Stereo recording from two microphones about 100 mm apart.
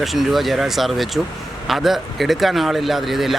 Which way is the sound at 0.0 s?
Centre (ahead or behind).